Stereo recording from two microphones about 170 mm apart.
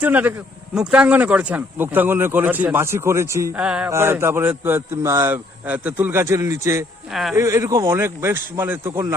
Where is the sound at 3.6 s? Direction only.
5° right (ahead or behind).